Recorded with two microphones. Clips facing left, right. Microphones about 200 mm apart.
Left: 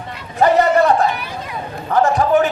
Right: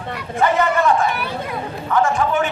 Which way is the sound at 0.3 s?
40° left (ahead or behind).